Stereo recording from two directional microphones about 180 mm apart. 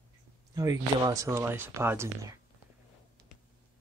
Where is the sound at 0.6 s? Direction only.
20° right (ahead or behind).